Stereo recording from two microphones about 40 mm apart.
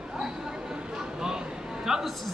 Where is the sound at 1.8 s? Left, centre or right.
Centre.